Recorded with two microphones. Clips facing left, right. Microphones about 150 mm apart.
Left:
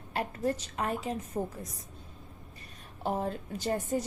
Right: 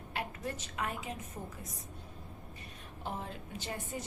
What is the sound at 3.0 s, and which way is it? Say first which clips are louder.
A woman's voice: left 9 dB; 40° left (ahead or behind).